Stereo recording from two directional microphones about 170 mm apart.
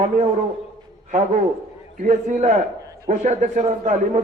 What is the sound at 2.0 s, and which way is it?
A man's voice, 45° right (ahead or behind).